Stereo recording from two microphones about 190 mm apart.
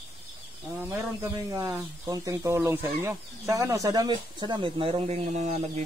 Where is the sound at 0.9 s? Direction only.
15° right (ahead or behind).